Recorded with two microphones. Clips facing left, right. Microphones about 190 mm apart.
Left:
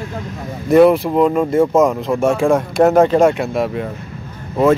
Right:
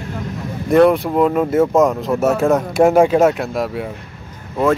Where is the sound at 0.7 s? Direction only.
5° left (ahead or behind).